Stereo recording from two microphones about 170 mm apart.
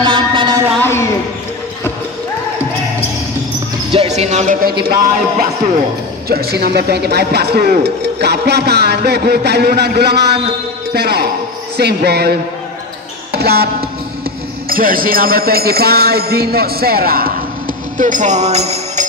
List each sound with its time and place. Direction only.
0.0 s music: 30° right (ahead or behind)
3.9 s music: 35° right (ahead or behind)
4.6 s music: 60° right (ahead or behind)
6.2 s speech: 65° right (ahead or behind)
13.3 s music: 70° right (ahead or behind)
14.7 s music: 55° right (ahead or behind)
17.9 s jingle bell: 50° right (ahead or behind)